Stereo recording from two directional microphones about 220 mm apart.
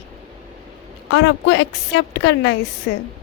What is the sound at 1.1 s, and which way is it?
A woman's voice, 55° left (ahead or behind).